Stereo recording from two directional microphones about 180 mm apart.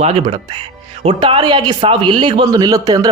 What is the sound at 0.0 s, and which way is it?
Speech, 35° right (ahead or behind).